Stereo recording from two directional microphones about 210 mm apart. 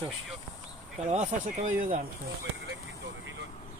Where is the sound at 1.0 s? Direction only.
35° right (ahead or behind).